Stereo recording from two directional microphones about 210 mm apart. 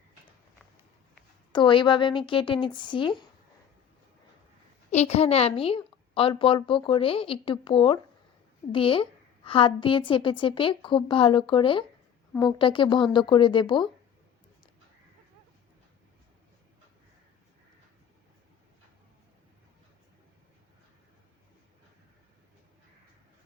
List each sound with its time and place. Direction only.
1.5 s a woman's voice: 20° left (ahead or behind)
4.9 s a woman's voice: 30° left (ahead or behind)